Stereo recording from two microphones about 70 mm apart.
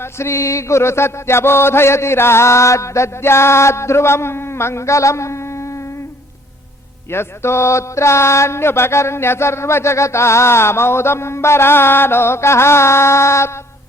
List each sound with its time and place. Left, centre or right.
0.0 s music: left
7.1 s music: left